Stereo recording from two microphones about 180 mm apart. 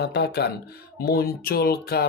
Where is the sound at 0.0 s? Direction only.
70° left (ahead or behind).